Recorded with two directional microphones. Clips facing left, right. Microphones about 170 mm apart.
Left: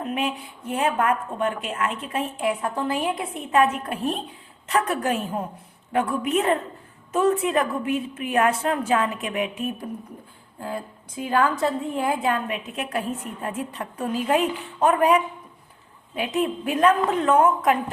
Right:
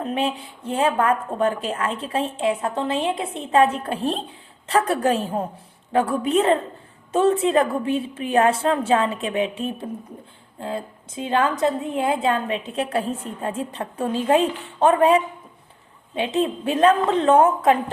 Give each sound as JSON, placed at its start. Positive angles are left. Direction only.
{"t": 0.0, "sound": "a woman's voice", "side_deg": -30}